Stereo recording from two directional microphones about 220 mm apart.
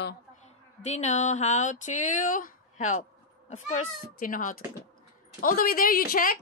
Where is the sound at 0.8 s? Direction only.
30° left (ahead or behind).